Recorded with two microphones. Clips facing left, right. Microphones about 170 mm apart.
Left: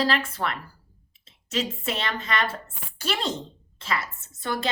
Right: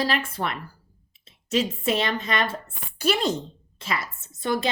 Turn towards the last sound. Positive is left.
turn(degrees=-15)  # may be behind; listen again after turning